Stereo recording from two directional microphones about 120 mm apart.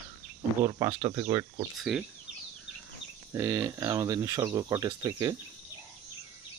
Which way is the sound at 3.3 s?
20° right (ahead or behind).